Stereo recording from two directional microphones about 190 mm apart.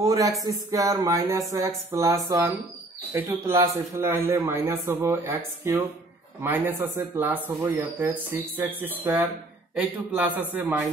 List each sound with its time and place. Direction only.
0.0 s speech: 20° right (ahead or behind)